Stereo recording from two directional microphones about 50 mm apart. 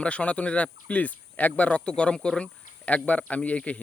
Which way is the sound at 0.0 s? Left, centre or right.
Left.